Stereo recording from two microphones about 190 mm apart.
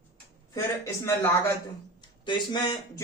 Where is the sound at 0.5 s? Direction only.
15° left (ahead or behind).